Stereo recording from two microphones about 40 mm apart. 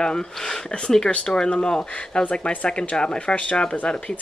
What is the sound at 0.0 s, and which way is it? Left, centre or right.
Speech, centre.